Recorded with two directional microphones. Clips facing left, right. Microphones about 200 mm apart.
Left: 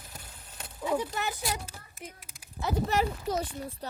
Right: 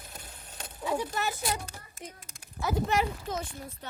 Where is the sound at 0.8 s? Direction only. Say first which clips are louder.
Left 1 dB; 20° left (ahead or behind).